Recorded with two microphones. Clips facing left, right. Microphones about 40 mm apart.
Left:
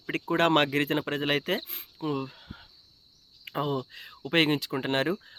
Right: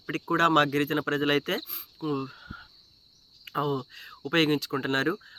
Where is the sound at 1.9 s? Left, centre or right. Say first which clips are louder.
Right 1 dB; left.